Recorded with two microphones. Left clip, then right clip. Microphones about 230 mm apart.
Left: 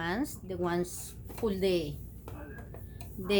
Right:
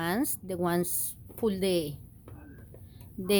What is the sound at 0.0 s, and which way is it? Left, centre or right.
A woman's voice, right.